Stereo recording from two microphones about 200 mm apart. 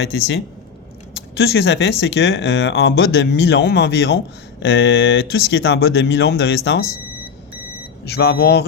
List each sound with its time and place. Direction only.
0.1 s speech: 60° left (ahead or behind)
1.5 s speech: 60° left (ahead or behind)
8.0 s speech: 55° left (ahead or behind)